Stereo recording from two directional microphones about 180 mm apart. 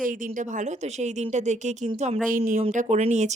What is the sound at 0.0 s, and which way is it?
A woman's voice, 50° right (ahead or behind).